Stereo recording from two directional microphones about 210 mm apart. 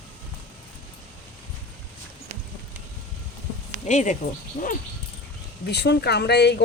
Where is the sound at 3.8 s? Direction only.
35° left (ahead or behind).